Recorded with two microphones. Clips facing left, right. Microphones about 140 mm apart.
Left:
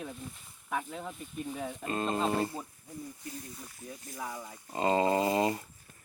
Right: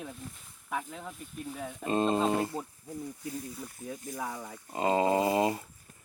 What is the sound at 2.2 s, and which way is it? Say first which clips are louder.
Speech: right 2 dB; 15° right (ahead or behind).